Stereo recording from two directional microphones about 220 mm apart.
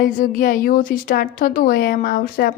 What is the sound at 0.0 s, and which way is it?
A woman's voice, 40° left (ahead or behind).